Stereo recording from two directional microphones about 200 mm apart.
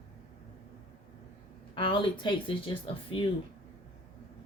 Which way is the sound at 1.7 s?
25° left (ahead or behind).